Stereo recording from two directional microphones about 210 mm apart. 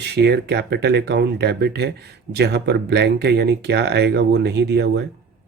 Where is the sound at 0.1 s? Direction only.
50° right (ahead or behind).